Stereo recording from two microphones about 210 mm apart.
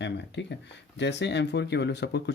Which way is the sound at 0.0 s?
55° left (ahead or behind).